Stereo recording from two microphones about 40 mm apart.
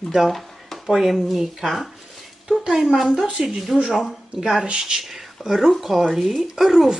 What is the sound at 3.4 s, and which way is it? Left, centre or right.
Speech, right.